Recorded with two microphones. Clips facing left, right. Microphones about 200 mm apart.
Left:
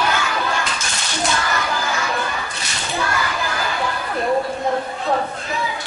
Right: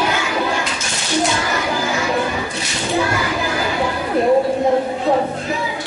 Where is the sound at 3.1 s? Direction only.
15° right (ahead or behind).